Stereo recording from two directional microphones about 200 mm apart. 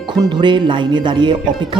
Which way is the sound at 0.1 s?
20° right (ahead or behind).